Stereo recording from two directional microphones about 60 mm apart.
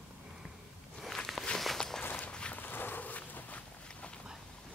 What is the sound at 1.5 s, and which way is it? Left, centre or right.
Walk, centre.